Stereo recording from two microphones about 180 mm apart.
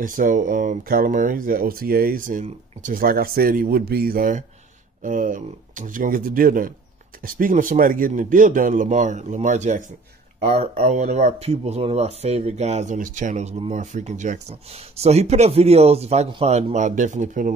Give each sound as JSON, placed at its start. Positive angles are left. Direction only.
{"t": 0.0, "sound": "speech", "side_deg": -45}